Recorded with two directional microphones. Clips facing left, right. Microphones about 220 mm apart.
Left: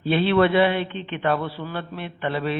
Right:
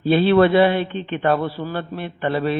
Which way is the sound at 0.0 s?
40° right (ahead or behind).